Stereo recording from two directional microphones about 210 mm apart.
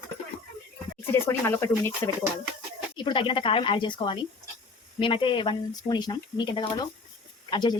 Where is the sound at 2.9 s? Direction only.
25° left (ahead or behind).